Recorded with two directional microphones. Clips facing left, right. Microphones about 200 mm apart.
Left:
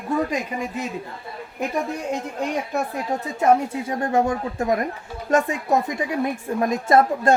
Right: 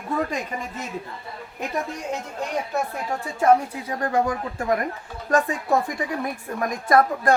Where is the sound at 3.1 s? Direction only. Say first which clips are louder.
Even; 25° left (ahead or behind).